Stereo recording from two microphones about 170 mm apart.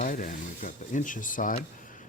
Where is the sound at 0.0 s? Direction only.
50° left (ahead or behind).